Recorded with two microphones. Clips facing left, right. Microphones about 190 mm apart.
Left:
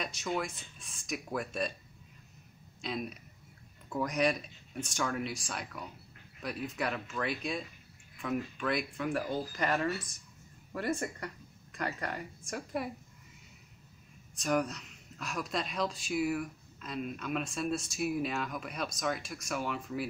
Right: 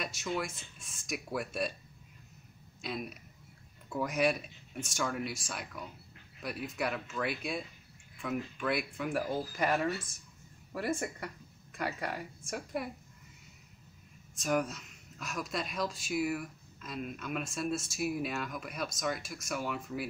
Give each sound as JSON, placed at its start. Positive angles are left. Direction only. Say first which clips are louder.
{"t": 0.0, "sound": "speech", "louder": "left 1 dB", "side_deg": -5}
{"t": 2.8, "sound": "speech", "louder": "left 2 dB", "side_deg": -5}
{"t": 14.4, "sound": "speech", "louder": "left 1 dB", "side_deg": -5}